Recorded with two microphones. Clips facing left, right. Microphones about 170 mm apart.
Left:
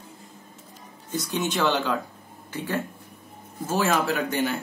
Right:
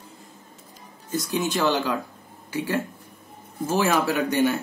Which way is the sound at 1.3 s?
10° right (ahead or behind).